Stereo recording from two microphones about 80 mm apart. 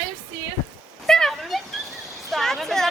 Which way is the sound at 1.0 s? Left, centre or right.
Centre.